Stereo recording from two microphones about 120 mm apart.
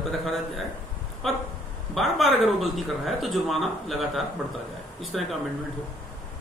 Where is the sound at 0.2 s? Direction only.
Centre (ahead or behind).